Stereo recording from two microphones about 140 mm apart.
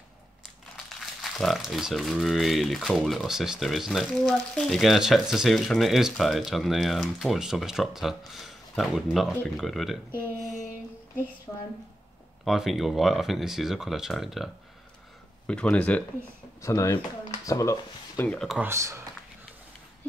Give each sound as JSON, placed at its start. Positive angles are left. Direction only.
{"t": 1.2, "sound": "speech", "side_deg": 0}
{"t": 11.5, "sound": "a woman's voice", "side_deg": 20}
{"t": 12.4, "sound": "speech", "side_deg": 0}
{"t": 16.6, "sound": "speech", "side_deg": 20}
{"t": 18.3, "sound": "speech", "side_deg": 5}
{"t": 18.6, "sound": "speech", "side_deg": -20}